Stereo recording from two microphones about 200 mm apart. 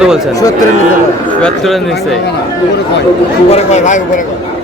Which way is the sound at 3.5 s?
35° left (ahead or behind).